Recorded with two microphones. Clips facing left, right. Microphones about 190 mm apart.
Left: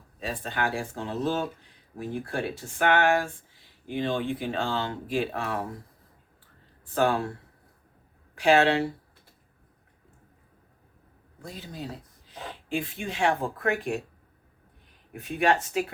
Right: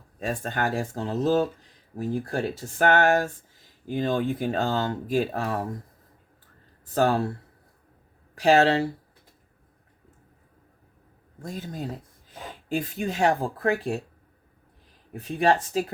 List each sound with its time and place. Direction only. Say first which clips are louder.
0.2 s speech: right 3 dB; 45° right (ahead or behind)
6.9 s speech: right 2 dB; 40° right (ahead or behind)
8.4 s speech: right 2 dB; 40° right (ahead or behind)
11.4 s speech: right 4 dB; 45° right (ahead or behind)
15.1 s speech: right 2 dB; 35° right (ahead or behind)